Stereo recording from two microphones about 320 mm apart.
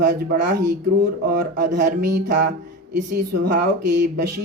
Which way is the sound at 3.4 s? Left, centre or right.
Right.